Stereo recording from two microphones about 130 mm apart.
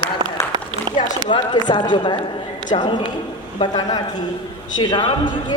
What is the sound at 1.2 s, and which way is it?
A man's voice, 35° left (ahead or behind).